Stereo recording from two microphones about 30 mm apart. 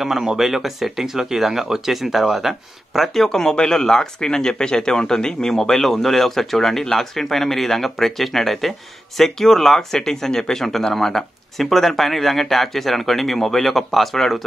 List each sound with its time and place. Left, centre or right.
0.4 s speech: centre
3.3 s speech: centre